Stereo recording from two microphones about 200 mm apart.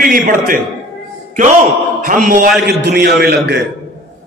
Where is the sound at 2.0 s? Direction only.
45° right (ahead or behind).